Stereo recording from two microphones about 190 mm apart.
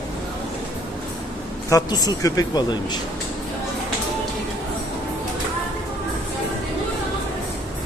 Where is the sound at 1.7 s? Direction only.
20° left (ahead or behind).